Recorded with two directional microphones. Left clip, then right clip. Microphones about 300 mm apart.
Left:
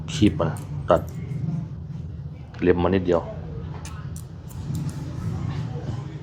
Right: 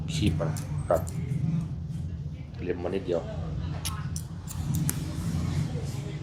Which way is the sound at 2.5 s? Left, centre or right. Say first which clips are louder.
Left 11 dB; left.